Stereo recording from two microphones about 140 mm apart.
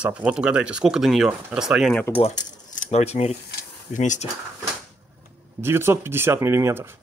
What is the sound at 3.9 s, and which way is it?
Speech, 60° left (ahead or behind).